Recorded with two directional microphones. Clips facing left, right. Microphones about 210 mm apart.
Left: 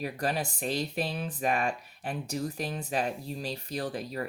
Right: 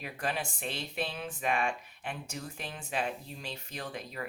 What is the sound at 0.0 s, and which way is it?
Speech, 40° left (ahead or behind).